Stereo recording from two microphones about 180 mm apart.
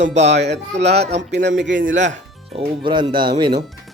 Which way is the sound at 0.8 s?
70° right (ahead or behind).